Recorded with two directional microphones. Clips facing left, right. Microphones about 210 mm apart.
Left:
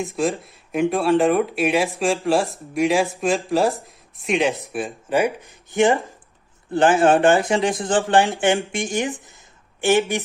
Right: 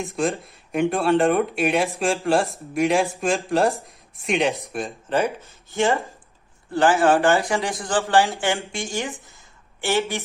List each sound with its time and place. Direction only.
0.0 s speech: centre (ahead or behind); by 10.2 s 15° left (ahead or behind)